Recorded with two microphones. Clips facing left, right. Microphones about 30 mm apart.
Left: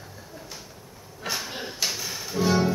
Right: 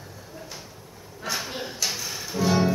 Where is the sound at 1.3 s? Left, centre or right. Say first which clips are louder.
Right 1 dB; centre.